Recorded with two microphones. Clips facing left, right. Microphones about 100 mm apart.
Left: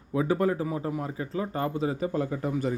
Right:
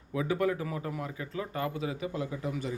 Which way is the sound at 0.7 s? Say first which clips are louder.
Left 5 dB; 25° left (ahead or behind).